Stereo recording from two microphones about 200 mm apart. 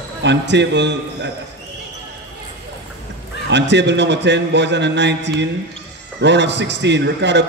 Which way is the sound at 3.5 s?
60° right (ahead or behind).